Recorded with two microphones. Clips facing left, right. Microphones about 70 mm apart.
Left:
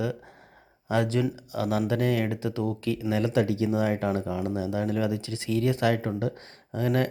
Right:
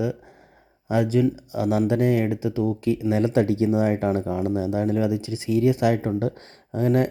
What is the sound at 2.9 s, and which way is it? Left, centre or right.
Speech, right.